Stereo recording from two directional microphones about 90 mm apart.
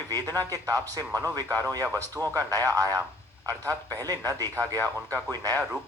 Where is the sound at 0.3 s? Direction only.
40° right (ahead or behind).